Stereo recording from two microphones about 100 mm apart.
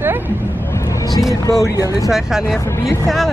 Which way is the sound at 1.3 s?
35° left (ahead or behind).